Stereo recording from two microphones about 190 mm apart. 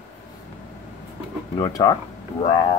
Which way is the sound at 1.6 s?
20° left (ahead or behind).